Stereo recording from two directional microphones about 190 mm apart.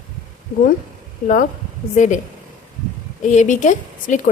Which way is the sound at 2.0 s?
40° left (ahead or behind).